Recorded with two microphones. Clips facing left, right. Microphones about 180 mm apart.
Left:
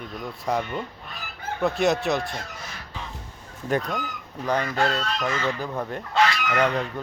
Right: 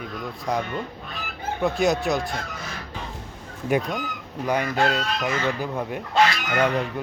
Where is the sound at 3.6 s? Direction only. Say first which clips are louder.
Right 2 dB; 10° right (ahead or behind).